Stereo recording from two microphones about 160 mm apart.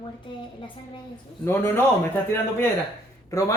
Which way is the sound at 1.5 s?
15° left (ahead or behind).